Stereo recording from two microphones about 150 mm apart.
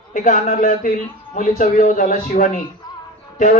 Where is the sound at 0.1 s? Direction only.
70° left (ahead or behind).